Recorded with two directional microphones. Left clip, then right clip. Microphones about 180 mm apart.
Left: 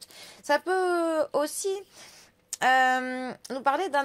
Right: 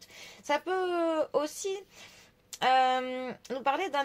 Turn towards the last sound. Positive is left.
turn(degrees=35)  # may be behind; listen again after turning